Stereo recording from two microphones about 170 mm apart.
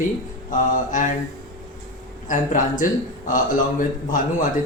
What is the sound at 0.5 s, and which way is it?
Speech, 50° left (ahead or behind).